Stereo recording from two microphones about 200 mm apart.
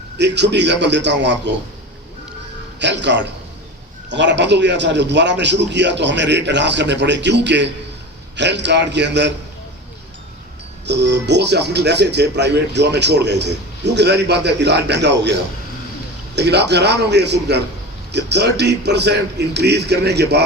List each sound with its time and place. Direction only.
0.2 s speech: 60° right (ahead or behind)
2.7 s speech: 60° right (ahead or behind)
10.8 s speech: 60° right (ahead or behind)